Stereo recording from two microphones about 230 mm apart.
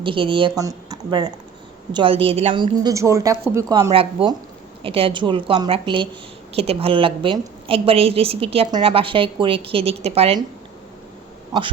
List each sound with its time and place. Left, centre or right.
0.0 s a woman's voice: right